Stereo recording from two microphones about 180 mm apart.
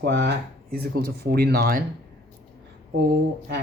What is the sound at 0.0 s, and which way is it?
Speech, 70° right (ahead or behind).